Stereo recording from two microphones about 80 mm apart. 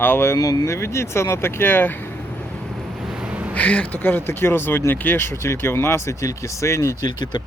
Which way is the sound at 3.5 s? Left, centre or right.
Centre.